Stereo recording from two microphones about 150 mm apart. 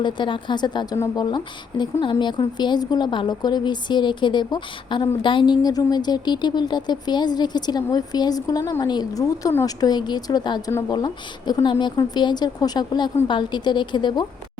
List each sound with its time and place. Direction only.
0.0 s a woman's voice: 30° left (ahead or behind)
10.7 s speech: 15° left (ahead or behind)
10.9 s a woman's voice: 30° left (ahead or behind)